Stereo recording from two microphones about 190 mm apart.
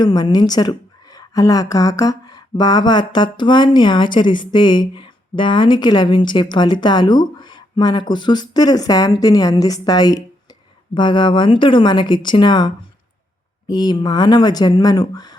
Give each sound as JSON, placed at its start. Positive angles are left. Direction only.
{"t": 0.0, "sound": "a woman's voice", "side_deg": 20}